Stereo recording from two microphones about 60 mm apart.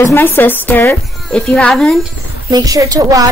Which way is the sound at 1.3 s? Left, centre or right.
Centre.